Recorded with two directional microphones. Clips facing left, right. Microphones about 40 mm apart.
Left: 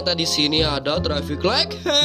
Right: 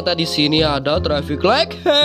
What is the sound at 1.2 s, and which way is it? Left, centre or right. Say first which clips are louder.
Speech: right 6 dB; right.